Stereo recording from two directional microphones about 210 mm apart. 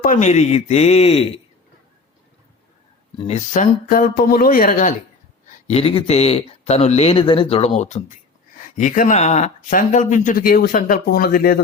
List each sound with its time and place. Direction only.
0.0 s speech: 35° left (ahead or behind)
3.2 s speech: 30° left (ahead or behind)